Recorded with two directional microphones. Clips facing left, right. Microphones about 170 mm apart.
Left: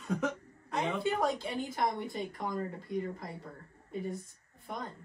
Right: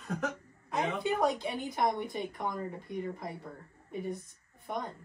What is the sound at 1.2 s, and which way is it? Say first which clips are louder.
A woman's voice: right 2 dB; 20° right (ahead or behind).